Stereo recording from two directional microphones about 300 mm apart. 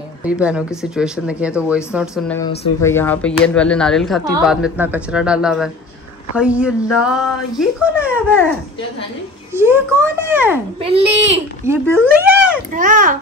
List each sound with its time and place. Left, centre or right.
0.2 s speech: centre
2.8 s speech: centre
9.5 s a child's voice: centre
10.8 s a child's voice: centre
11.6 s speech: centre
12.7 s a child's voice: right